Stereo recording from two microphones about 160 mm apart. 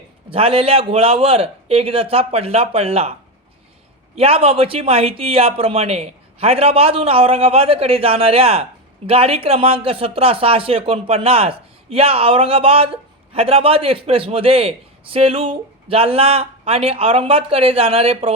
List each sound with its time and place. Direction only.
0.3 s speech: 35° right (ahead or behind)